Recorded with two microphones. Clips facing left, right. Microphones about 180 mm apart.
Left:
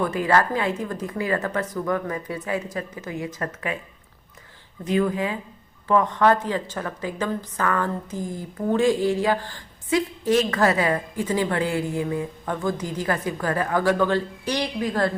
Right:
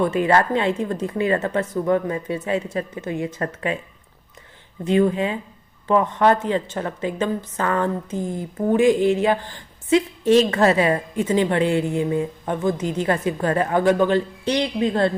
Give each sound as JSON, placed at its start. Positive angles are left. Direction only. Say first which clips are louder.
{"t": 0.0, "sound": "a woman's voice", "louder": "right 3 dB", "side_deg": -25}
{"t": 4.9, "sound": "a woman's voice", "louder": "right 4 dB", "side_deg": -25}